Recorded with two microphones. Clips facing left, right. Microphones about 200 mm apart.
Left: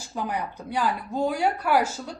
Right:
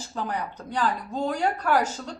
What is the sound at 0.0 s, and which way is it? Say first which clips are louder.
A woman's voice: left 1 dB; 10° left (ahead or behind).